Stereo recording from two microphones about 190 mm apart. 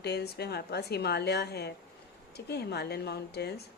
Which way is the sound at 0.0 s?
60° left (ahead or behind).